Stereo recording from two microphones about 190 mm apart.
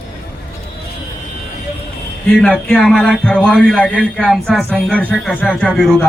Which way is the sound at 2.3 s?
5° left (ahead or behind).